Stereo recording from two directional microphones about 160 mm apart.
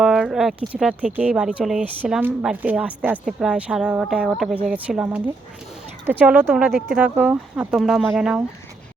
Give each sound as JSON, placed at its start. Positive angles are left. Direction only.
{"t": 0.0, "sound": "speech", "side_deg": 0}